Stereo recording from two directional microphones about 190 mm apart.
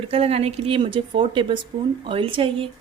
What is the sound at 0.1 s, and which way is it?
Speech, 30° right (ahead or behind).